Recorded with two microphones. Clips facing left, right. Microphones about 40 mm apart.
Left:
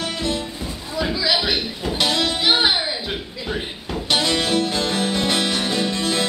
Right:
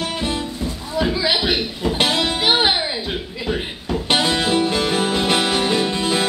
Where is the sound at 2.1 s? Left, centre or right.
Right.